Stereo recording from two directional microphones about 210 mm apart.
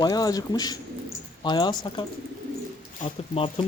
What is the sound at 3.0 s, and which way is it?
Speech, 25° left (ahead or behind).